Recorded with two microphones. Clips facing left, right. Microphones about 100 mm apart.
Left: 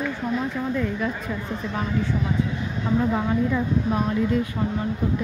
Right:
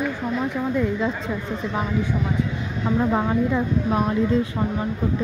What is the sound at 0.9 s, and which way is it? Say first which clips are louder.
Speech: right 3 dB; 25° right (ahead or behind).